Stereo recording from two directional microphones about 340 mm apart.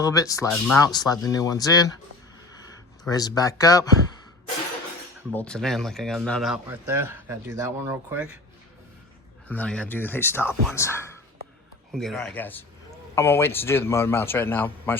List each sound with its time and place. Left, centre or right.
0.0 s speech: centre
3.0 s speech: centre
5.3 s speech: centre
9.5 s speech: centre